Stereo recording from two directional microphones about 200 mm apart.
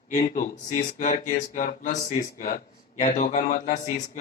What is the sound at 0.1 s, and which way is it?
Speech, 40° left (ahead or behind).